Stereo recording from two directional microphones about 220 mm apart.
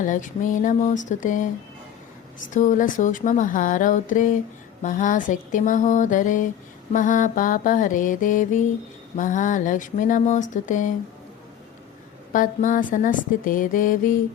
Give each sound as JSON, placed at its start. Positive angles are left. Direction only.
{"t": 0.0, "sound": "speech", "side_deg": 35}
{"t": 2.5, "sound": "speech", "side_deg": 35}
{"t": 12.3, "sound": "speech", "side_deg": 35}